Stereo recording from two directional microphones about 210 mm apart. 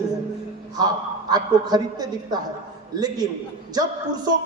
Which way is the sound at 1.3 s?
20° right (ahead or behind).